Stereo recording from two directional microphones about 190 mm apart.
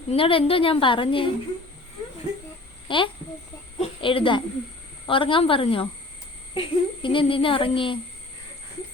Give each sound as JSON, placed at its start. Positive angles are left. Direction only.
{"t": 0.1, "sound": "speech", "side_deg": 30}
{"t": 2.9, "sound": "speech", "side_deg": 25}